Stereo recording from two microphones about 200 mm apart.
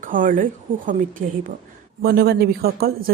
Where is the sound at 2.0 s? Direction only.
50° right (ahead or behind).